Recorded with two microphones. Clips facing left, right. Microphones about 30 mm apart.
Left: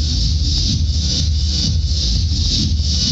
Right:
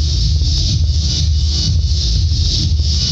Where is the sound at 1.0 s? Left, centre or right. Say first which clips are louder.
Left 1 dB; right.